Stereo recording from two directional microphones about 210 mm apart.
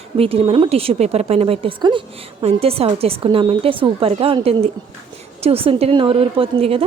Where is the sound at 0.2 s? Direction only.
25° right (ahead or behind).